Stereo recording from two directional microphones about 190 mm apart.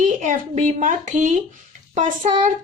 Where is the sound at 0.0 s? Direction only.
40° right (ahead or behind).